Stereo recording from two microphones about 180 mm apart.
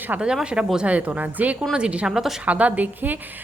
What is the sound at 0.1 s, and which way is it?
A woman's voice, 5° right (ahead or behind).